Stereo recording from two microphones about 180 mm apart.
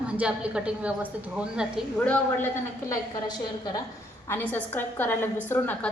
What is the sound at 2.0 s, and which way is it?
A woman's voice, 10° left (ahead or behind).